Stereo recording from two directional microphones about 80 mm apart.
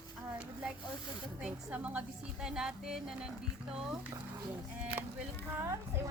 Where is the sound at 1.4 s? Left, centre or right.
Centre.